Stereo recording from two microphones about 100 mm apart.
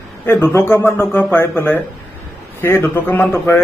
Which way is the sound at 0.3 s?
25° left (ahead or behind).